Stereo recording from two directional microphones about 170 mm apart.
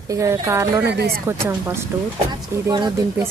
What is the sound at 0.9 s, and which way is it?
Speech, 75° right (ahead or behind).